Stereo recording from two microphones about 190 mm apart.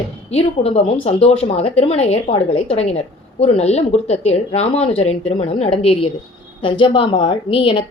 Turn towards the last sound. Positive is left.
turn(degrees=25)  # may be behind; listen again after turning